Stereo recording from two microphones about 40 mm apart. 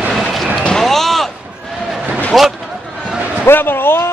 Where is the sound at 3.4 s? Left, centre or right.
Left.